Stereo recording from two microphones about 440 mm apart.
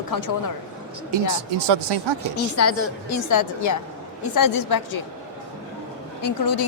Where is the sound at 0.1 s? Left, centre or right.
Left.